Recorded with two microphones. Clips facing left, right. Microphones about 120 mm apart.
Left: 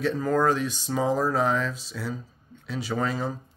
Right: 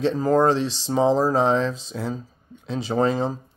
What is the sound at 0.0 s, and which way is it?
Speech, 30° right (ahead or behind).